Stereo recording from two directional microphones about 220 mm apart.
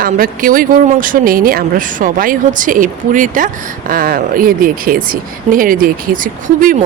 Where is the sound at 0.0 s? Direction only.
40° right (ahead or behind).